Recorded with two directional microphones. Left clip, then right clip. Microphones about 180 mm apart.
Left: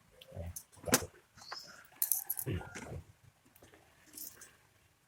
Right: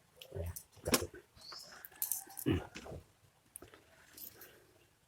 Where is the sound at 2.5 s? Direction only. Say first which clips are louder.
Right 8 dB; 60° right (ahead or behind).